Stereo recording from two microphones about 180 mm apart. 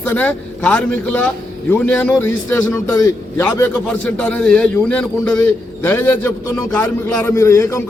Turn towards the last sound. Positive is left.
turn(degrees=15)  # may be behind; listen again after turning